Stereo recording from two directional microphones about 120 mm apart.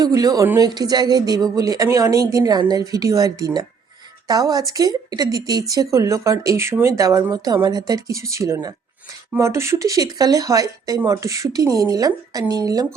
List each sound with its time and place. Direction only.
0.0 s a woman's voice: 30° right (ahead or behind)